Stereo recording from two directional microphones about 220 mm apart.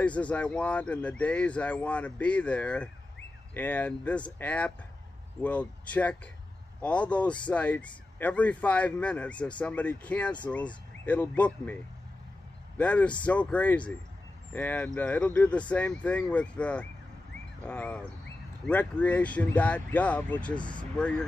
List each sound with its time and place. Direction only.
0.0 s a man's voice: 5° left (ahead or behind)
20.5 s speech: 20° left (ahead or behind)